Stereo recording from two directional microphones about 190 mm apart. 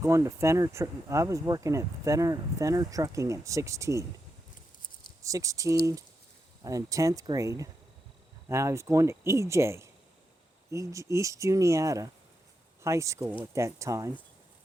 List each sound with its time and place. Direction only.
0.0 s speech: 15° right (ahead or behind)
5.2 s speech: 15° right (ahead or behind)